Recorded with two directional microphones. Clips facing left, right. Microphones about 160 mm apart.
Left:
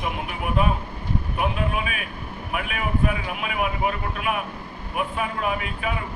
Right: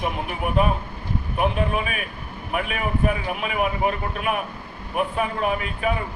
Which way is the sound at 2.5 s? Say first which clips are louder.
Right 2 dB; 40° right (ahead or behind).